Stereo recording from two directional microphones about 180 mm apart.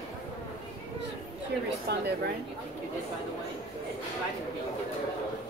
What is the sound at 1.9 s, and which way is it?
Speech, 65° right (ahead or behind).